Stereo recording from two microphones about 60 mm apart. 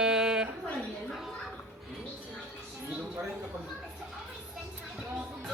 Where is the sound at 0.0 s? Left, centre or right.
Centre.